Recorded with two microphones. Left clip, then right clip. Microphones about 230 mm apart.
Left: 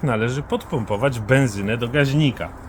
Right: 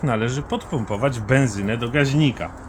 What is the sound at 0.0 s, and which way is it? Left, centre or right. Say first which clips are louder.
Speech: left 1 dB; left.